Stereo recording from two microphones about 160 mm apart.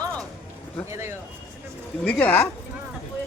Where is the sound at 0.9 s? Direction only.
15° right (ahead or behind).